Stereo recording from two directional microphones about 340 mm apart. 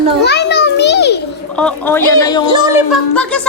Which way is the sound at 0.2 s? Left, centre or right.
Left.